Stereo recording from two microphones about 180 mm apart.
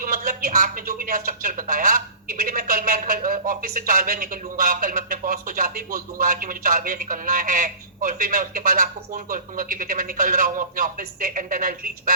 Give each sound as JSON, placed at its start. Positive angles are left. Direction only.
{"t": 0.0, "sound": "a man's voice", "side_deg": -50}